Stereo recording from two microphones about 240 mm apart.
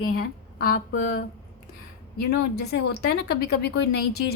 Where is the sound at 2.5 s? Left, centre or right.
Left.